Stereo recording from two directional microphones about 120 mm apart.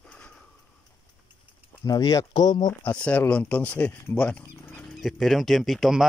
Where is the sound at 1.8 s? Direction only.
30° left (ahead or behind).